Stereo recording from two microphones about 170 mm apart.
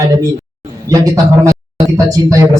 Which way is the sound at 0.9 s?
20° right (ahead or behind).